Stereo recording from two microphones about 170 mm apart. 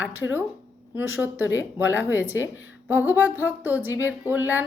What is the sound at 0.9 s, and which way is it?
A woman's voice, 10° right (ahead or behind).